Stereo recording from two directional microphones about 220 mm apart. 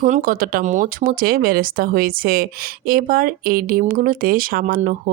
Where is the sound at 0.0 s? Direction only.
40° right (ahead or behind).